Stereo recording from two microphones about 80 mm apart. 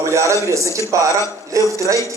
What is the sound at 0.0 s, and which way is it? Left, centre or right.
A man's voice, right.